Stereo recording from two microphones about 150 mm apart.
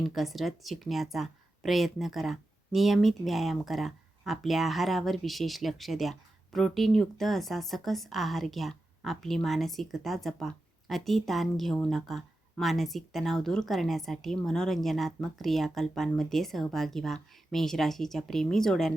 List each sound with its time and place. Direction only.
0.1 s a woman's voice: centre (ahead or behind)